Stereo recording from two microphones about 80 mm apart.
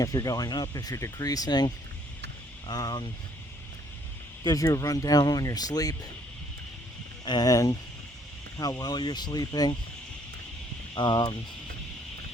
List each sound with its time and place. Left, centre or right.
0.0 s speech: left
4.4 s speech: left
7.4 s speech: left
10.9 s speech: left